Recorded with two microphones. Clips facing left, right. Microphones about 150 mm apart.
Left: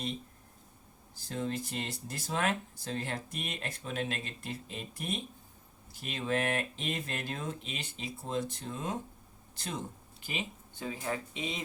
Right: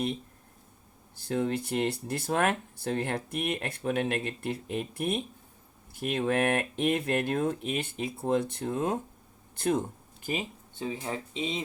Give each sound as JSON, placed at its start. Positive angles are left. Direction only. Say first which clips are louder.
{"t": 1.1, "sound": "speech", "louder": "right 6 dB", "side_deg": -60}
{"t": 10.8, "sound": "speech", "louder": "right 2 dB", "side_deg": -25}